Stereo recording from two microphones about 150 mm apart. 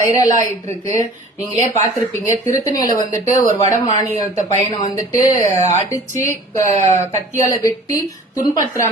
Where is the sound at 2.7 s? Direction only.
25° left (ahead or behind).